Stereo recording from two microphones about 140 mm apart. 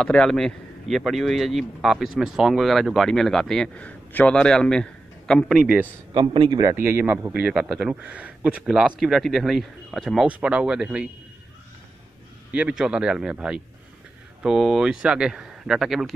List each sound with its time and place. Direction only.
0.0 s a man's voice: 5° left (ahead or behind)
6.1 s a man's voice: 35° right (ahead or behind)
6.7 s speech: 15° right (ahead or behind)
12.5 s a man's voice: 5° right (ahead or behind)